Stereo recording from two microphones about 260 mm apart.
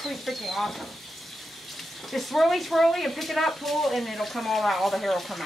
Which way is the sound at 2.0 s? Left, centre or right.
Centre.